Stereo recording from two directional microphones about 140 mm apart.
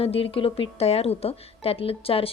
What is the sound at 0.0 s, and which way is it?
A woman's voice, 45° left (ahead or behind).